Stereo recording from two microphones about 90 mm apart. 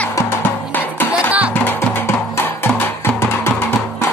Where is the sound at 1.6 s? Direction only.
25° left (ahead or behind).